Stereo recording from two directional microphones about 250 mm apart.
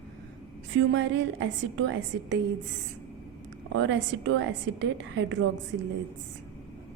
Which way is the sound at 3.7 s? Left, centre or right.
Right.